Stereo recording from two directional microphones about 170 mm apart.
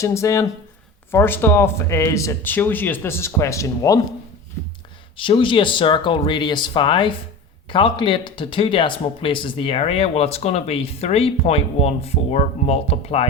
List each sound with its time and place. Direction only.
0.0 s speech: 15° left (ahead or behind)
5.1 s speech: 30° left (ahead or behind)